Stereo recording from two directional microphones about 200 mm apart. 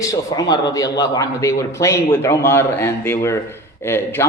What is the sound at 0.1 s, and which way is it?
A man's voice, 20° left (ahead or behind).